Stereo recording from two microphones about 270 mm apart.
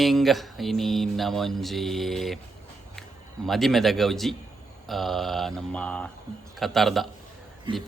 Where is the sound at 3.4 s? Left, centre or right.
Centre.